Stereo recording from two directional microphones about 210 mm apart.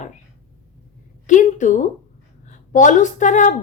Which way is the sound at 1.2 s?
35° left (ahead or behind).